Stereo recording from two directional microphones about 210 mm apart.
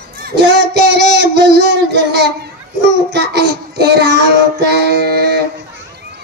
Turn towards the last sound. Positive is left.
turn(degrees=-50)  # may be behind; listen again after turning